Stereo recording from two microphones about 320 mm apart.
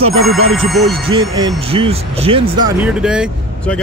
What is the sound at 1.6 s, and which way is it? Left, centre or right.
Speech, centre.